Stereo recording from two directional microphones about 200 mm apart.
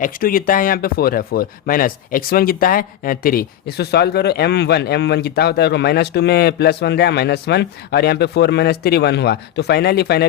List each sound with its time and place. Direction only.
0.0 s speech: 45° left (ahead or behind)